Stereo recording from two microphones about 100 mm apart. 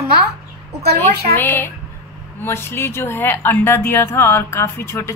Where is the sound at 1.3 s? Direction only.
20° left (ahead or behind).